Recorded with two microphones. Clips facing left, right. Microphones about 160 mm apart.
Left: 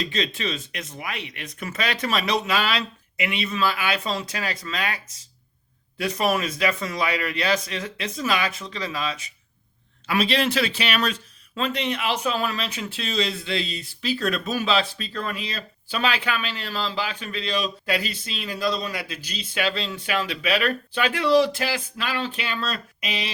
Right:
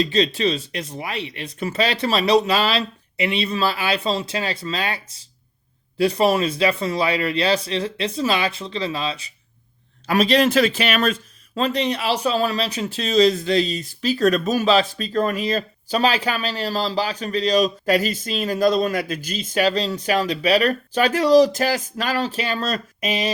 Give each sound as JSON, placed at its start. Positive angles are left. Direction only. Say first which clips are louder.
{"t": 0.0, "sound": "speech", "louder": "right 8 dB", "side_deg": -35}
{"t": 10.1, "sound": "speech", "louder": "right 6 dB", "side_deg": -40}